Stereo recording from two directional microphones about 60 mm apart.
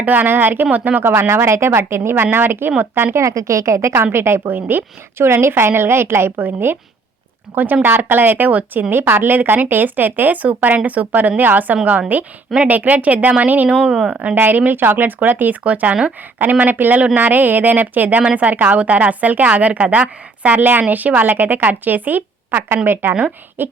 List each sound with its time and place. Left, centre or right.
0.0 s a woman's voice: right
1.0 s a woman's voice: right
3.2 s a woman's voice: right
13.8 s a woman's voice: centre
14.1 s a woman's voice: right